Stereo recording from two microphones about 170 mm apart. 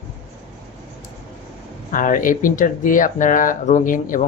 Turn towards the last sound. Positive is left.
turn(degrees=50)  # may be behind; listen again after turning